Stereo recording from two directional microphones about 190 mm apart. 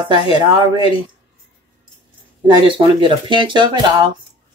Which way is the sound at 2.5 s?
25° right (ahead or behind).